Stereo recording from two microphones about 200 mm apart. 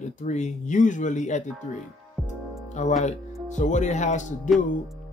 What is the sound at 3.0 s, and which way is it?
Speech, 35° left (ahead or behind).